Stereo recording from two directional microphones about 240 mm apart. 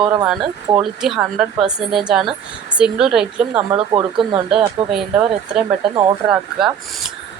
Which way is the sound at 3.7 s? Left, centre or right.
Right.